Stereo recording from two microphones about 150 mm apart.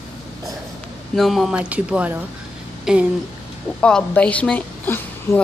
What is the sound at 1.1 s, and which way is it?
Speech, centre (ahead or behind).